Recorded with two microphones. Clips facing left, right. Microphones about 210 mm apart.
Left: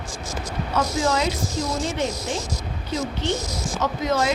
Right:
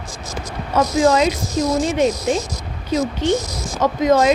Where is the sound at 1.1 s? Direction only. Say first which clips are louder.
Right 6 dB; 15° right (ahead or behind).